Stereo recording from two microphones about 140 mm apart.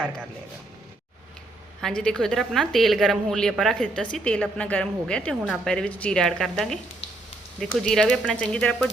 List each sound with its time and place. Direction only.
1.8 s a woman's voice: 5° left (ahead or behind)
7.8 s a woman's voice: 5° left (ahead or behind)